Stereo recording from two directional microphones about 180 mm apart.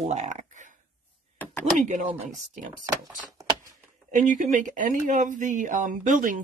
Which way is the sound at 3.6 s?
45° right (ahead or behind).